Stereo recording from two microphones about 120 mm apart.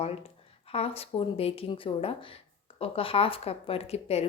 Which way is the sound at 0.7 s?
55° left (ahead or behind).